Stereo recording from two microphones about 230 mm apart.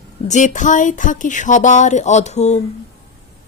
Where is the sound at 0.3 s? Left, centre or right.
Left.